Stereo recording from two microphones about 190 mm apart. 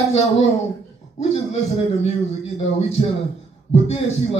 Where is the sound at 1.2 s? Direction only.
35° left (ahead or behind).